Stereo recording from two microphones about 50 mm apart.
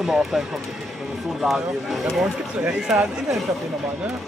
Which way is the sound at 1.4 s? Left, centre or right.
Centre.